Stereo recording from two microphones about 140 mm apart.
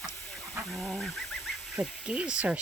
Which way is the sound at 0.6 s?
Centre (ahead or behind).